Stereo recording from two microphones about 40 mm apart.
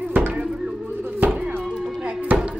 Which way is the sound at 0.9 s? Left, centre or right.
Right.